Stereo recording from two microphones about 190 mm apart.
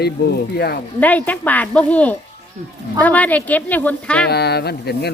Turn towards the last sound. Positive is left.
turn(degrees=60)  # may be behind; listen again after turning